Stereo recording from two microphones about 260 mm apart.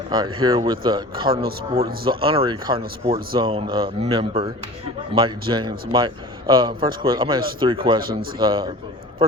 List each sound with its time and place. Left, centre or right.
0.1 s speech: centre